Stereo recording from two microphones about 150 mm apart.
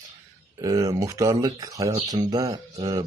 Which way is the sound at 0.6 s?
25° right (ahead or behind).